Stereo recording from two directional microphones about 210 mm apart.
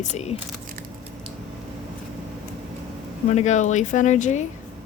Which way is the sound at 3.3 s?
35° left (ahead or behind).